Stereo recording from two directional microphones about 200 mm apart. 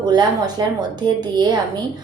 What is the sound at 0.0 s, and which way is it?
A woman's voice, 20° right (ahead or behind).